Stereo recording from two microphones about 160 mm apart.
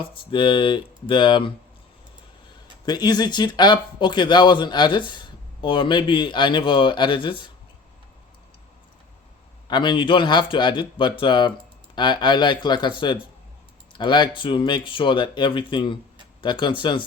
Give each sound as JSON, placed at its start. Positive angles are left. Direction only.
{"t": 0.1, "sound": "speech", "side_deg": 30}
{"t": 2.8, "sound": "speech", "side_deg": 25}
{"t": 9.6, "sound": "speech", "side_deg": 30}